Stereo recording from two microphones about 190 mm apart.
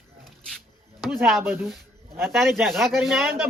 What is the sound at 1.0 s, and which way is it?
A man's voice, centre (ahead or behind).